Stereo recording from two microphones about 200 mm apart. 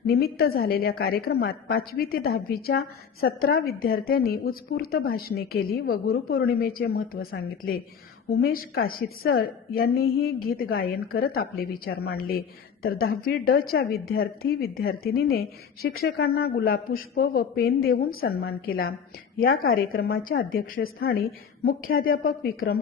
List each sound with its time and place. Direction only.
0.1 s a woman's voice: 50° left (ahead or behind)